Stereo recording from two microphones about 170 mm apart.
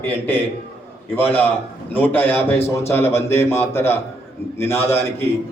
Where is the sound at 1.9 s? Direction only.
10° left (ahead or behind).